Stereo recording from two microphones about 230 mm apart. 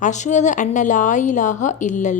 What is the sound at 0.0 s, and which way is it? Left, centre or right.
A woman's voice, left.